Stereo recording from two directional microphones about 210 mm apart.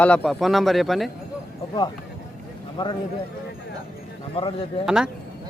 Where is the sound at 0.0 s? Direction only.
5° left (ahead or behind).